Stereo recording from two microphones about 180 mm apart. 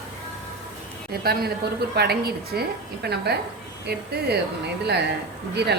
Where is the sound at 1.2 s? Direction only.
60° right (ahead or behind).